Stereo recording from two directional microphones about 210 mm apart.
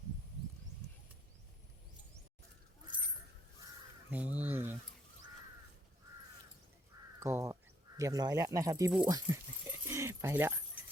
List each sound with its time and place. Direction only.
4.1 s a sound: 5° right (ahead or behind)
7.2 s crow: 15° right (ahead or behind)
7.9 s speech: 15° right (ahead or behind)